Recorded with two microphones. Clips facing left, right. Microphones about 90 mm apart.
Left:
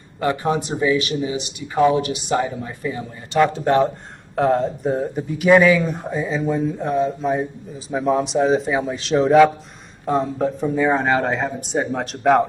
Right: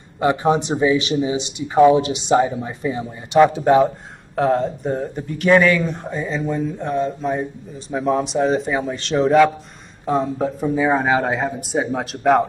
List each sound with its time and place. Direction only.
0.2 s speech: 20° right (ahead or behind)
4.4 s speech: centre (ahead or behind)